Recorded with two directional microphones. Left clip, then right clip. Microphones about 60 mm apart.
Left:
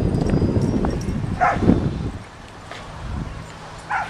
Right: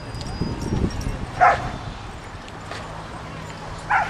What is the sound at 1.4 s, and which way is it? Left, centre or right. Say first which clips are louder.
Bow-wow: right 3 dB; centre.